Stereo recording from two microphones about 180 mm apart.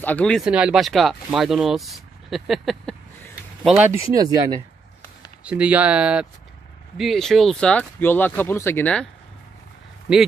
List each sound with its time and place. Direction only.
0.0 s speech: 5° left (ahead or behind)
0.5 s speech: 5° right (ahead or behind)
3.9 s speech: 15° right (ahead or behind)
5.4 s speech: 5° right (ahead or behind)